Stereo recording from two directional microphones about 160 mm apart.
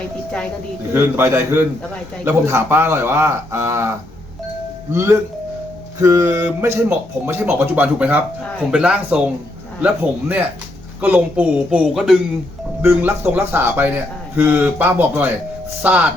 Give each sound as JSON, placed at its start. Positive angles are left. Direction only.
{"t": 0.9, "sound": "speech", "side_deg": -15}
{"t": 6.0, "sound": "speech", "side_deg": -20}